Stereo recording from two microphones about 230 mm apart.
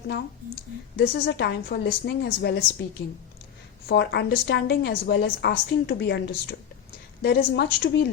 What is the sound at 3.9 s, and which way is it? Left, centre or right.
A woman's voice, left.